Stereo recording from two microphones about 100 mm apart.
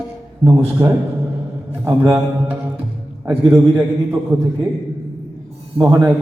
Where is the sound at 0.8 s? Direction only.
40° right (ahead or behind).